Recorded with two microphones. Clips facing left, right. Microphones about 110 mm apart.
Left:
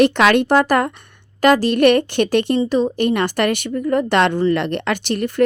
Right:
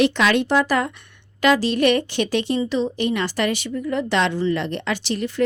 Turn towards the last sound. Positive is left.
turn(degrees=55)  # may be behind; listen again after turning